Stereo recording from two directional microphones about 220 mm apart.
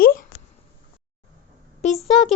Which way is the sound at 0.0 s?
40° left (ahead or behind).